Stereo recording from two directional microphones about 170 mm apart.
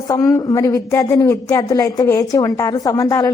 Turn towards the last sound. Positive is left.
turn(degrees=20)  # may be behind; listen again after turning